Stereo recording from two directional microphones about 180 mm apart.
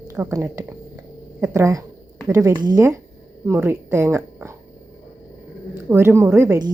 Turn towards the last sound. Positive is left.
turn(degrees=-20)  # may be behind; listen again after turning